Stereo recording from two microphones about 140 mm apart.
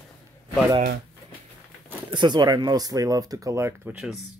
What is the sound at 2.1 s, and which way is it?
Speech, 30° right (ahead or behind).